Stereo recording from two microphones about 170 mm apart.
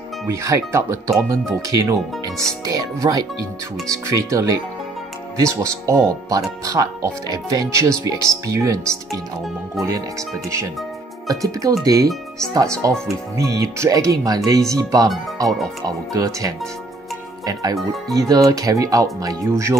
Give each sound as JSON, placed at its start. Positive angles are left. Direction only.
{"t": 0.3, "sound": "speech", "side_deg": -20}
{"t": 11.2, "sound": "speech", "side_deg": -20}
{"t": 13.4, "sound": "speech", "side_deg": -20}
{"t": 17.5, "sound": "speech", "side_deg": -20}